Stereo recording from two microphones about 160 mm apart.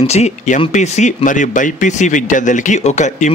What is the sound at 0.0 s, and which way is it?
Speech, 45° left (ahead or behind).